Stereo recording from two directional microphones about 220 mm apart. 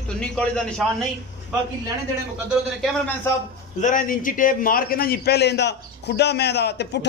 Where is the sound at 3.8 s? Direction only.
35° left (ahead or behind).